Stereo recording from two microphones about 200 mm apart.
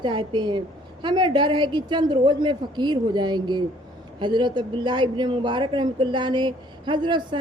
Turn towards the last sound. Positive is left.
turn(degrees=-20)  # may be behind; listen again after turning